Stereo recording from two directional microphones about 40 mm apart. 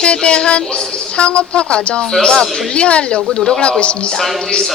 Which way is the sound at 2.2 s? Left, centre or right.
Centre.